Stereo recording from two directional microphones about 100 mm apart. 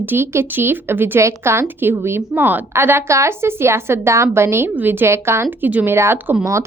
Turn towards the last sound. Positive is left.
turn(degrees=-30)  # may be behind; listen again after turning